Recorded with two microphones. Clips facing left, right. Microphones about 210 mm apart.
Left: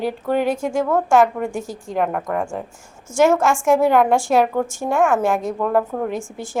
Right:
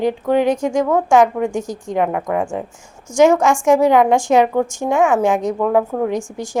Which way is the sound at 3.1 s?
15° right (ahead or behind).